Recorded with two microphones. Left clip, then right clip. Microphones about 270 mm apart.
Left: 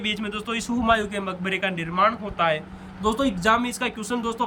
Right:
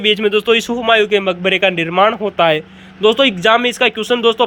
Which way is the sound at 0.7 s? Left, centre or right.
Right.